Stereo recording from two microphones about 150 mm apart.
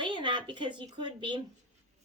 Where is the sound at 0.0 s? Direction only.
30° right (ahead or behind).